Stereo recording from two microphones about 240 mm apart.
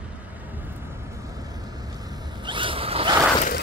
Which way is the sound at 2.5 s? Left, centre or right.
Right.